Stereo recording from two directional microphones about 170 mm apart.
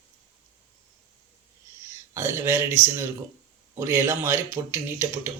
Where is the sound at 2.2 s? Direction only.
15° right (ahead or behind).